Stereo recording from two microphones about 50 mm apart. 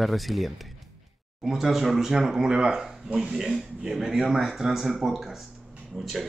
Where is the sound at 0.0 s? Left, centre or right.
Centre.